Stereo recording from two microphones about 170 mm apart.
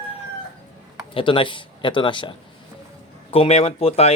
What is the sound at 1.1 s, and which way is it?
A man's voice, 30° left (ahead or behind).